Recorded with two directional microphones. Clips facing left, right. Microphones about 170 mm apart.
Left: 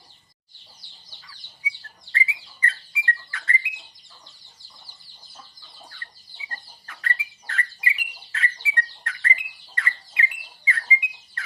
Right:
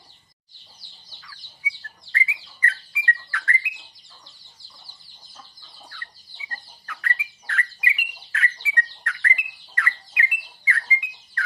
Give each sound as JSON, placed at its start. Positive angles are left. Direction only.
{"t": 2.1, "sound": "bird", "side_deg": 25}
{"t": 6.5, "sound": "bird", "side_deg": 30}
{"t": 10.7, "sound": "alarm clock", "side_deg": 20}